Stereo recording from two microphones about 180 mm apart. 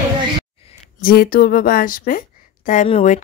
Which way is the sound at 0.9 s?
55° left (ahead or behind).